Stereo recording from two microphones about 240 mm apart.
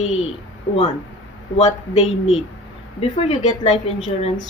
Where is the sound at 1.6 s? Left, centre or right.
Left.